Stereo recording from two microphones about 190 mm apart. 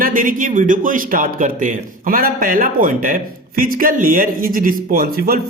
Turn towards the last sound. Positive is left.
turn(degrees=-50)  # may be behind; listen again after turning